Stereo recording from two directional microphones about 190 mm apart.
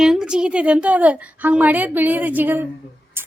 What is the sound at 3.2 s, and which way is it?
Music, 10° right (ahead or behind).